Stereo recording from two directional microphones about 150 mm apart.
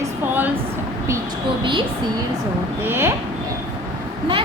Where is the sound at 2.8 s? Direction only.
15° right (ahead or behind).